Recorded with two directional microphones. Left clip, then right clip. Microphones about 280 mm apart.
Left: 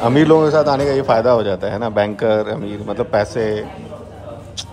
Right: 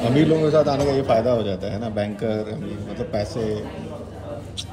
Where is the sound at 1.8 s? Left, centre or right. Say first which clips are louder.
Left 10 dB; centre.